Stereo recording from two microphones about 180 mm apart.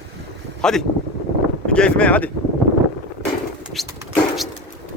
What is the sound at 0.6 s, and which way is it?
Speech, 5° left (ahead or behind).